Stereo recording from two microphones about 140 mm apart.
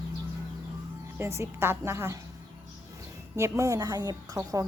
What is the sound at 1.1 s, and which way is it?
Speech, 20° right (ahead or behind).